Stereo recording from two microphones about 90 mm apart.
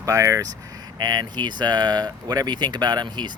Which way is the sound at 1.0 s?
50° right (ahead or behind).